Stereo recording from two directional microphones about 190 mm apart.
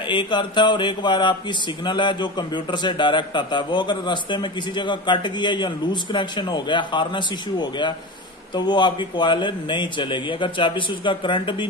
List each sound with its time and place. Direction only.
0.1 s a man's voice: 25° left (ahead or behind)